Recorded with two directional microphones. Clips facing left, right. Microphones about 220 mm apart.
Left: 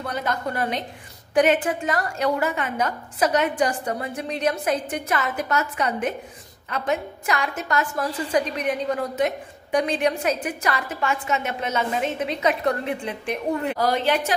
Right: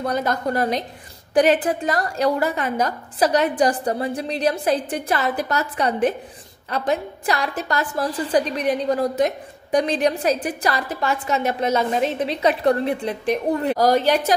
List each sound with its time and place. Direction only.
0.0 s a woman's voice: 40° right (ahead or behind)